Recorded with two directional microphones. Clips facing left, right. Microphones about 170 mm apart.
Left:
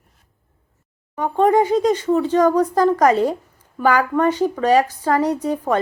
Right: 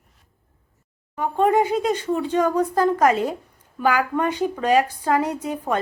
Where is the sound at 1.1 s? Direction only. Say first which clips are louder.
Left 3 dB; 5° right (ahead or behind).